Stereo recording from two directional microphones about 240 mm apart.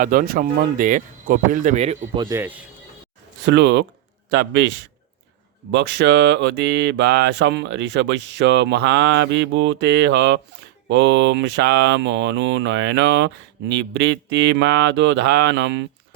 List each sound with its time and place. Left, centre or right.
0.0 s speech: right; by 2.6 s centre
3.4 s speech: right
5.7 s speech: right